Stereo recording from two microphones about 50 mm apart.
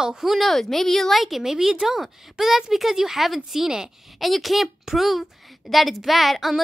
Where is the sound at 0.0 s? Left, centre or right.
Centre.